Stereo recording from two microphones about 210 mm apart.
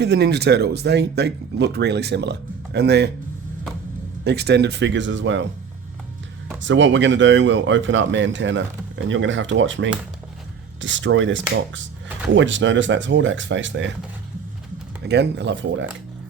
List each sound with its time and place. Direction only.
0.0 s speech: 50° right (ahead or behind)
4.2 s speech: 50° right (ahead or behind)
6.6 s speech: 60° right (ahead or behind)
15.0 s speech: 55° right (ahead or behind)